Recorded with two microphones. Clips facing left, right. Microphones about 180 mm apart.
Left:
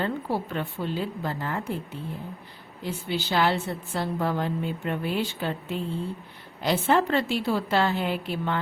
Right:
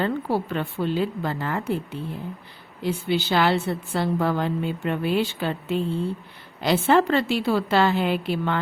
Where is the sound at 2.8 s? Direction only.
80° right.